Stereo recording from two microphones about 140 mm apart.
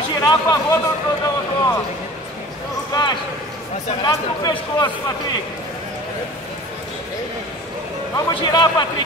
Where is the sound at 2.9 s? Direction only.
30° left (ahead or behind).